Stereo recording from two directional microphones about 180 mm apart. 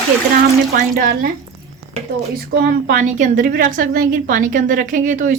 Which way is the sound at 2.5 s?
50° right (ahead or behind).